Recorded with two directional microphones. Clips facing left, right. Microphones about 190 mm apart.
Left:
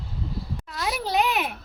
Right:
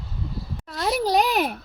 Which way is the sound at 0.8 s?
40° right (ahead or behind).